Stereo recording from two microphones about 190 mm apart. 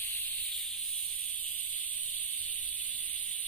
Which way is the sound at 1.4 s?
10° left (ahead or behind).